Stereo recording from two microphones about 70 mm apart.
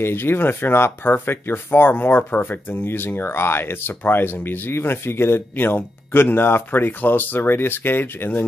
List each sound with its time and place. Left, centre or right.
0.0 s speech: left